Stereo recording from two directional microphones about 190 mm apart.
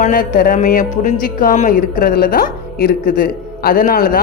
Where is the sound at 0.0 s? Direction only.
45° left (ahead or behind).